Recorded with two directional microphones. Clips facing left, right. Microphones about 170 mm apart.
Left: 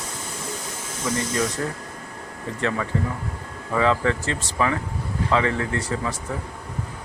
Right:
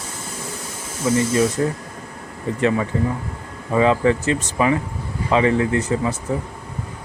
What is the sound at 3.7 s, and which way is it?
Speech, 15° right (ahead or behind).